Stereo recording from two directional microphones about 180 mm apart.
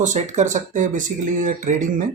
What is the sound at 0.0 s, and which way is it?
Speech, 40° right (ahead or behind).